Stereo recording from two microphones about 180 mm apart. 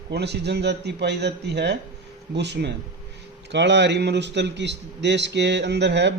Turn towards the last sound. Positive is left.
turn(degrees=-75)  # may be behind; listen again after turning